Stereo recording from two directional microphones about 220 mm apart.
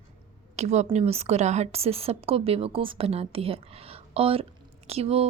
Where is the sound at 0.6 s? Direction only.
30° right (ahead or behind).